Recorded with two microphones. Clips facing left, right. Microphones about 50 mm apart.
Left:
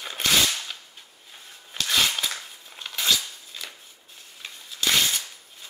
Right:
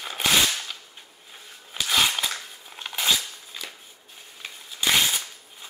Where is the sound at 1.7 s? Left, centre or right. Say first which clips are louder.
Right 1 dB; centre.